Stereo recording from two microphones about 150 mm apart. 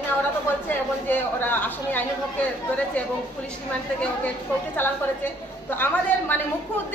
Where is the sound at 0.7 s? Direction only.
15° left (ahead or behind).